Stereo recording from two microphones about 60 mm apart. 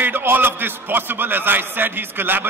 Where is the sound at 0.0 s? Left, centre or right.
Right.